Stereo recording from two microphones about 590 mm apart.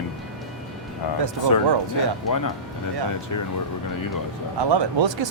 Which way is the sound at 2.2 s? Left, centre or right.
Left.